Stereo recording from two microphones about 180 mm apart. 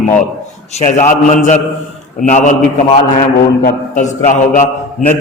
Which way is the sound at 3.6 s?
45° left (ahead or behind).